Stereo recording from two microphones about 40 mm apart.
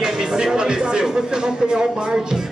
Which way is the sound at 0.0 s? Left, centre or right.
Centre.